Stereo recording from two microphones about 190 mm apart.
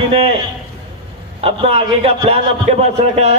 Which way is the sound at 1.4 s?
30° right (ahead or behind).